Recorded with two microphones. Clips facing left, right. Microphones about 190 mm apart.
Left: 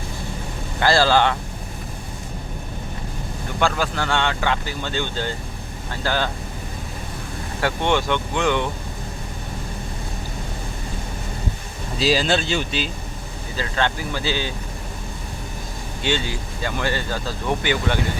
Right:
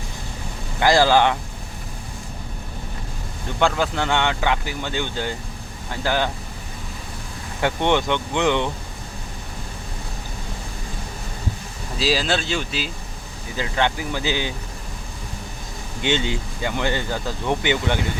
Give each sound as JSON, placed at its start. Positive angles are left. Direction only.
{"t": 0.8, "sound": "speech", "side_deg": -15}
{"t": 3.6, "sound": "speech", "side_deg": -20}
{"t": 7.6, "sound": "speech", "side_deg": -20}
{"t": 11.9, "sound": "speech", "side_deg": 0}
{"t": 13.6, "sound": "speech", "side_deg": -15}
{"t": 16.0, "sound": "speech", "side_deg": -20}